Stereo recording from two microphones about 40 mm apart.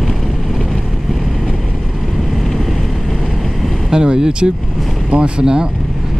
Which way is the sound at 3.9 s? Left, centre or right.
Centre.